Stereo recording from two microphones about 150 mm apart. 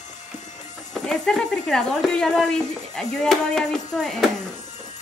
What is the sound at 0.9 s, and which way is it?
A woman's voice, 5° left (ahead or behind).